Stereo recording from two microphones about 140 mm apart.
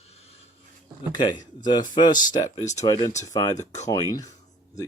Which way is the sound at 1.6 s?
30° left (ahead or behind).